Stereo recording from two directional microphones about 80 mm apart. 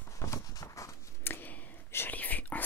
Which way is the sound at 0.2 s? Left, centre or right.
Left.